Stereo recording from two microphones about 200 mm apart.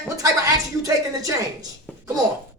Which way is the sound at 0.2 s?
15° right (ahead or behind).